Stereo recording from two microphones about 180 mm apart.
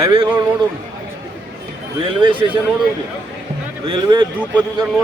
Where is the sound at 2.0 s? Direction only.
30° right (ahead or behind).